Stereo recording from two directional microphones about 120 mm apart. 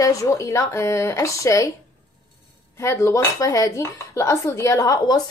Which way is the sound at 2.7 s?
25° left (ahead or behind).